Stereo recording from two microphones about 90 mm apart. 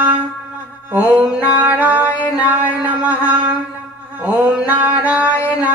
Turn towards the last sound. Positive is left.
turn(degrees=-15)  # may be behind; listen again after turning